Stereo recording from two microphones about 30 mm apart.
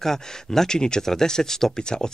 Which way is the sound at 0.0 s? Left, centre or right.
Centre.